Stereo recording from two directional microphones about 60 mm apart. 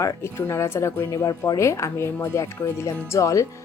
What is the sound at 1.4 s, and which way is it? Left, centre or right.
Speech, left.